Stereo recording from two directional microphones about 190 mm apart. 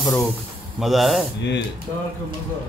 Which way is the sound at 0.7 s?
Centre (ahead or behind).